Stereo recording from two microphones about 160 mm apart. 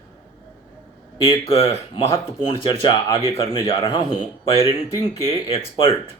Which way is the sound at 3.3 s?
15° left (ahead or behind).